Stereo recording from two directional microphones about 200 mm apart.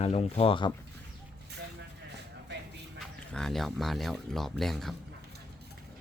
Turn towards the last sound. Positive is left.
turn(degrees=0)  # may be behind; listen again after turning